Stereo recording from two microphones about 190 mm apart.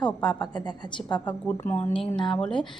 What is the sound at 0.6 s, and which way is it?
Speech, 20° left (ahead or behind).